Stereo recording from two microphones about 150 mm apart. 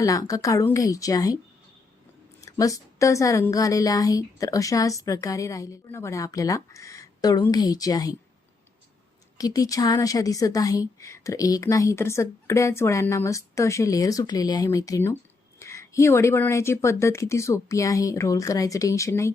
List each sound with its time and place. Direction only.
0.0 s a woman's voice: 20° left (ahead or behind)
2.4 s a woman's voice: 20° left (ahead or behind)
9.4 s a woman's voice: 25° left (ahead or behind)